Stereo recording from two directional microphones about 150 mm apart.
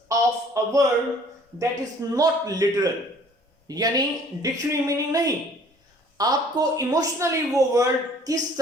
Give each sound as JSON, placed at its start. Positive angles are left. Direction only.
{"t": 0.1, "sound": "speech", "side_deg": -20}